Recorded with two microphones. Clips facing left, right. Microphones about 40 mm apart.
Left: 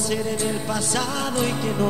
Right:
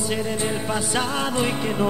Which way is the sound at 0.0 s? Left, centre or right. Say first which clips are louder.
Even; centre.